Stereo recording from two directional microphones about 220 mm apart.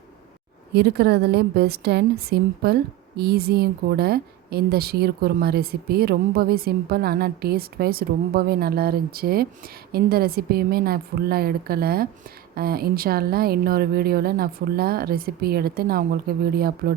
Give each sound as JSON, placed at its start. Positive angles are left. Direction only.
{"t": 0.7, "sound": "a woman's voice", "side_deg": -45}